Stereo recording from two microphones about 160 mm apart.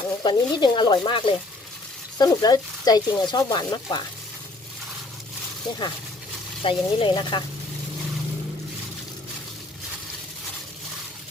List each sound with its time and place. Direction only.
0.2 s speech: 25° left (ahead or behind)
6.6 s speech: 35° left (ahead or behind)